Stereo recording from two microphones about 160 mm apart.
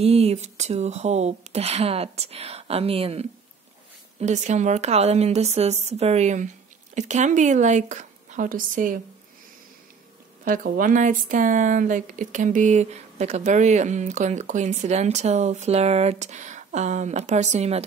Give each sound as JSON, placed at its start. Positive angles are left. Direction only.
{"t": 0.0, "sound": "speech", "side_deg": -40}
{"t": 10.4, "sound": "speech", "side_deg": -60}